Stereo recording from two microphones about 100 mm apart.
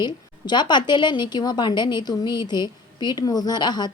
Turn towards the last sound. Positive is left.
turn(degrees=45)  # may be behind; listen again after turning